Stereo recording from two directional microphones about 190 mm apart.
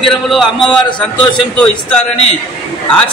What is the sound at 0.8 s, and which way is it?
Speech, 25° left (ahead or behind).